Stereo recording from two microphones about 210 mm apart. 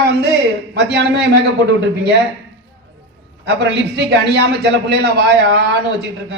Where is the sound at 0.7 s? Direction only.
55° right (ahead or behind).